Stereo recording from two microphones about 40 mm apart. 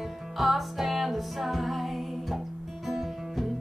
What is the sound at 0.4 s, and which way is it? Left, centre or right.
Music, centre.